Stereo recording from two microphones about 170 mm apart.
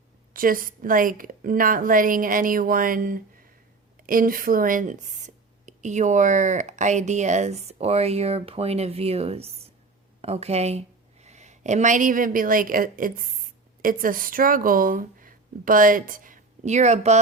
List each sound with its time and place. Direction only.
0.3 s a woman's voice: 55° right (ahead or behind)